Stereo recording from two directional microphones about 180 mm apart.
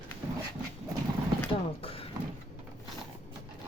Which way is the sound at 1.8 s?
30° left (ahead or behind).